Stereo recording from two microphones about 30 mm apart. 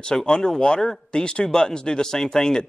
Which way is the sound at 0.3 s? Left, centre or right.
Left.